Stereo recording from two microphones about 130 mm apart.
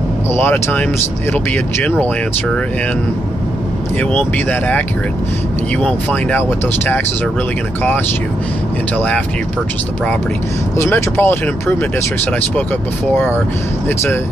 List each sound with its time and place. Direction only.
0.3 s speech: 15° left (ahead or behind)
4.5 s speech: 10° left (ahead or behind)
8.9 s speech: 10° left (ahead or behind)
10.8 s speech: 20° left (ahead or behind)
13.1 s speech: 15° left (ahead or behind)